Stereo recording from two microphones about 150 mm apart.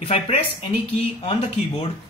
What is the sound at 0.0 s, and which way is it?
Speech, 40° left (ahead or behind).